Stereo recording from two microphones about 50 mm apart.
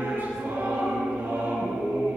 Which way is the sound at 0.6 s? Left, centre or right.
Right.